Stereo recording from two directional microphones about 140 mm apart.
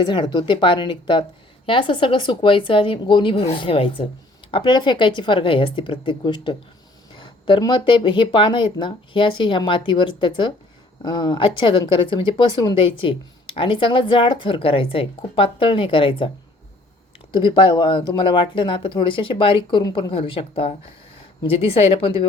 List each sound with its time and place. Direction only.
0.0 s speech: 30° left (ahead or behind)
17.3 s a woman's voice: 35° left (ahead or behind)